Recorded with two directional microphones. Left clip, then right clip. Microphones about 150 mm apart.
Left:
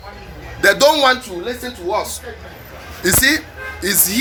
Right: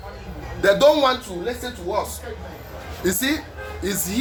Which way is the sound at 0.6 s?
20° left (ahead or behind).